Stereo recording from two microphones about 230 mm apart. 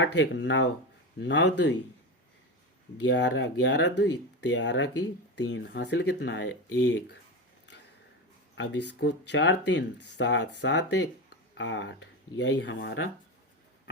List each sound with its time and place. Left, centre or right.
0.0 s speech: left
3.1 s speech: left
8.5 s speech: left